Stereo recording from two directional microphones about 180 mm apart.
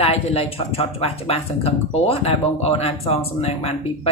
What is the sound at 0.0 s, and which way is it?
Speech, 35° left (ahead or behind).